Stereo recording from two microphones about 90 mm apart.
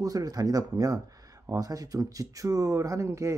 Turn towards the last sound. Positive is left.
turn(degrees=-35)  # may be behind; listen again after turning